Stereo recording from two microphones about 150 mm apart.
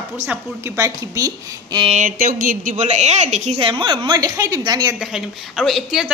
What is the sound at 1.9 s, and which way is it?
A woman's voice, 60° right (ahead or behind).